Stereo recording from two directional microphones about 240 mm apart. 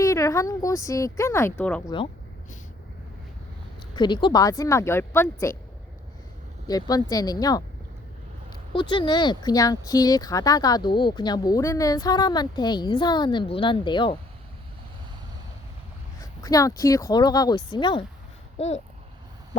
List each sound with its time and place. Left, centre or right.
0.0 s speech: centre
3.9 s speech: centre
6.7 s speech: centre
8.7 s speech: centre
16.2 s speech: centre